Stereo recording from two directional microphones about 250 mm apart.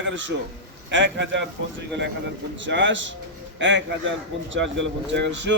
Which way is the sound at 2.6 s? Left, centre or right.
Right.